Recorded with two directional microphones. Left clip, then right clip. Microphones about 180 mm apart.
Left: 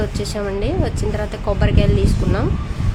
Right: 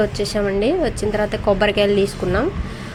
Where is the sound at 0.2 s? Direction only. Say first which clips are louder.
Right 4 dB; 15° right (ahead or behind).